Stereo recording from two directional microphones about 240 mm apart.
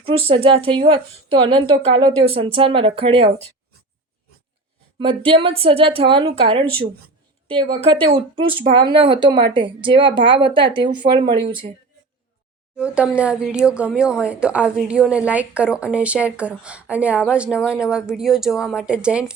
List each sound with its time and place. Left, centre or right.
0.3 s a woman's voice: right
4.9 s a woman's voice: right
12.7 s speech: centre